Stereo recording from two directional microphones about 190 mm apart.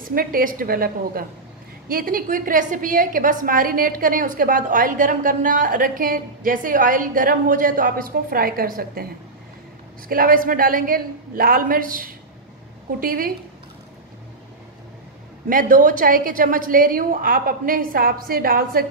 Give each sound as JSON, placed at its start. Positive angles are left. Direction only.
{"t": 0.1, "sound": "a woman's voice", "side_deg": -50}
{"t": 10.0, "sound": "a woman's voice", "side_deg": -50}
{"t": 15.4, "sound": "a woman's voice", "side_deg": -45}